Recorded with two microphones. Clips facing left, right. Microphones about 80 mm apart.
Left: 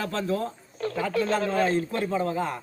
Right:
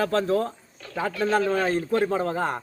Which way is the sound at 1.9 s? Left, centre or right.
Right.